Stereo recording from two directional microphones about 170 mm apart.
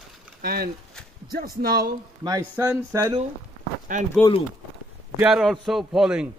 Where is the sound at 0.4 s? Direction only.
65° right (ahead or behind).